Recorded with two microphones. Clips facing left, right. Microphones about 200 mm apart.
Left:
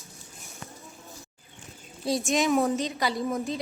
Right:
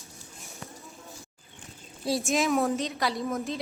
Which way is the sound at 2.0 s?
Centre (ahead or behind).